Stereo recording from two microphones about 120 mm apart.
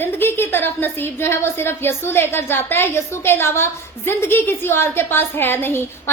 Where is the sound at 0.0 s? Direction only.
20° left (ahead or behind).